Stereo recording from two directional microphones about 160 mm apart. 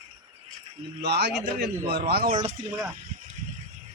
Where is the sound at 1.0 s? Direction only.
90° right.